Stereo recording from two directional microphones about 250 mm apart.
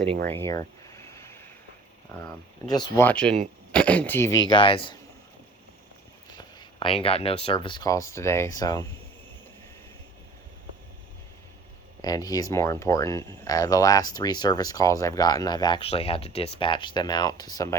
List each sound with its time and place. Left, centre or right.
0.3 s a sound: centre
2.1 s speech: centre
6.3 s speech: centre
12.0 s speech: centre